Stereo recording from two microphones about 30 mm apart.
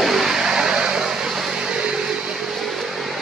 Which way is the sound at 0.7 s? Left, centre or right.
Right.